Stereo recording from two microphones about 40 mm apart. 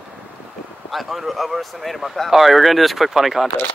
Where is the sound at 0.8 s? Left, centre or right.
Centre.